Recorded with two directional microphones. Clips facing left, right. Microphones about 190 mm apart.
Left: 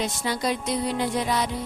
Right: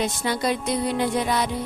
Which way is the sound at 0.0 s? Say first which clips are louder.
Right 2 dB; 55° right (ahead or behind).